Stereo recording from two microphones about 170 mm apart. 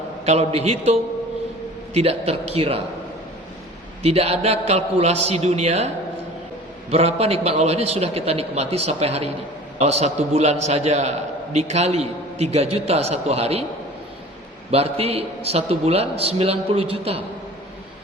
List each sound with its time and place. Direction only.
0.3 s a man's voice: 40° right (ahead or behind)
4.0 s a man's voice: 35° right (ahead or behind)
6.9 s a man's voice: 35° right (ahead or behind)
14.7 s a man's voice: 35° right (ahead or behind)